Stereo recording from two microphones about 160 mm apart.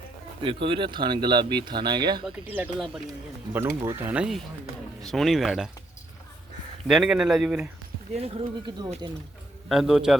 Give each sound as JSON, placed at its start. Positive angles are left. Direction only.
{"t": 0.4, "sound": "speech", "side_deg": -30}
{"t": 2.2, "sound": "speech", "side_deg": -10}
{"t": 3.5, "sound": "speech", "side_deg": -15}
{"t": 6.8, "sound": "speech", "side_deg": -5}
{"t": 8.1, "sound": "speech", "side_deg": -40}
{"t": 9.6, "sound": "speech", "side_deg": 0}